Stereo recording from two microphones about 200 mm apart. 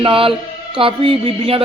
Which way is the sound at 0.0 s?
25° right (ahead or behind).